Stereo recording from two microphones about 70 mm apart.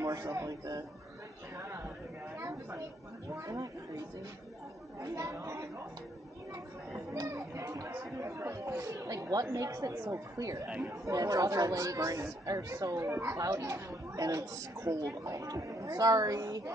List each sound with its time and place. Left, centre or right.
0.0 s a woman's voice: right
3.3 s speech: right
5.0 s speech: right
7.2 s speech: right
13.1 s speech: right
13.4 s a woman's voice: right